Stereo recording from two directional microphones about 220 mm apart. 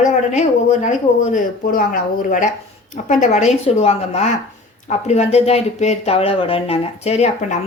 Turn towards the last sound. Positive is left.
turn(degrees=30)  # may be behind; listen again after turning